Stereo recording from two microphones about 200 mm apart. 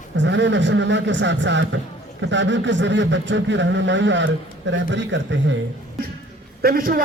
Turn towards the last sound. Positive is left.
turn(degrees=-45)  # may be behind; listen again after turning